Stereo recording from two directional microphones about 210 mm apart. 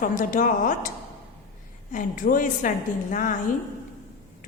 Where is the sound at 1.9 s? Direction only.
40° left (ahead or behind).